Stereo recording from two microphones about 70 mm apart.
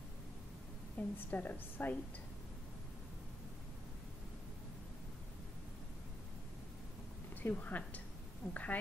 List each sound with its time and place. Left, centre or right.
0.9 s a woman's voice: left
7.4 s a woman's voice: left